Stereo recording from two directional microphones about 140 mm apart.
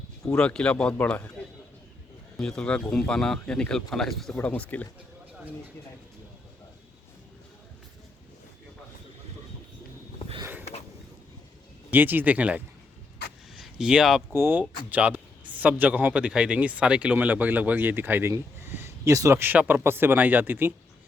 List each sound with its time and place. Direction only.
0.3 s speech: 5° left (ahead or behind)
2.4 s speech: 5° left (ahead or behind)
11.9 s a man's voice: 15° right (ahead or behind)
14.3 s a man's voice: 15° right (ahead or behind)